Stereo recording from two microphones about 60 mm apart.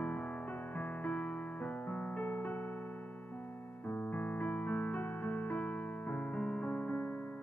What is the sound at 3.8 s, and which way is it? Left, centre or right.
Music, left.